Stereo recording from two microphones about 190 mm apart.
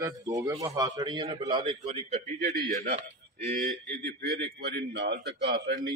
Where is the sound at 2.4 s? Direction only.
50° right (ahead or behind).